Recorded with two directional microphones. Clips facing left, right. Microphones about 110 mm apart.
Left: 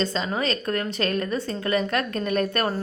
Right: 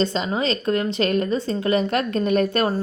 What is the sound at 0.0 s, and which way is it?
A woman's voice, 25° right (ahead or behind).